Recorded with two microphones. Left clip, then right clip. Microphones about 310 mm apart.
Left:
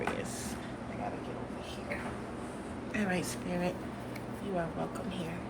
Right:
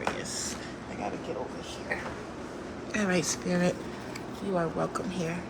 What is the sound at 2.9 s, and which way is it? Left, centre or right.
Speech, centre.